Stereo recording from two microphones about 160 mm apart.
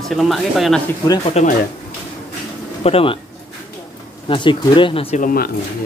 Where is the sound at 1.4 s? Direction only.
40° left (ahead or behind).